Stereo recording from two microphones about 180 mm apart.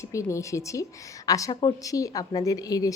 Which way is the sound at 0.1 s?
15° left (ahead or behind).